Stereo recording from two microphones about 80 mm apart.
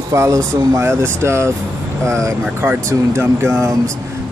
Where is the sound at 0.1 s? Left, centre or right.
Right.